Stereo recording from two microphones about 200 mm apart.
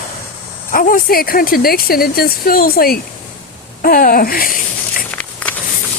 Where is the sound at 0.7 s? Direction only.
45° left (ahead or behind).